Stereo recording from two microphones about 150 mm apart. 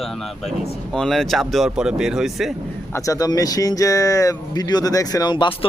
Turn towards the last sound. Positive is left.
turn(degrees=30)  # may be behind; listen again after turning